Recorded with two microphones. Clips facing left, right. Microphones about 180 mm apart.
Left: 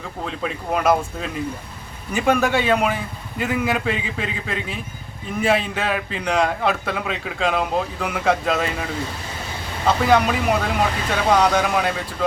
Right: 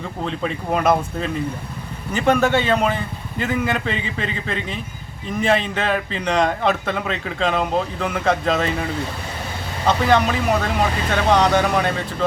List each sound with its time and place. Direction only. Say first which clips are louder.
0.3 s a man's voice: right 2 dB; centre (ahead or behind)
9.8 s a man's voice: even; 5° left (ahead or behind)